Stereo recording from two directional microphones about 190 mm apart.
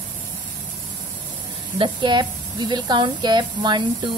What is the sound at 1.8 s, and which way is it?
Speech, 25° right (ahead or behind).